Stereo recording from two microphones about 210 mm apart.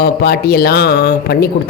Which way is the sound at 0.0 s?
50° left (ahead or behind).